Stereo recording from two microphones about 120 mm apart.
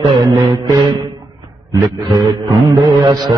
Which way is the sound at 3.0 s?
35° right (ahead or behind).